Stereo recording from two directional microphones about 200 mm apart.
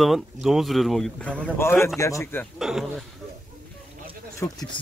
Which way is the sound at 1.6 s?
10° left (ahead or behind).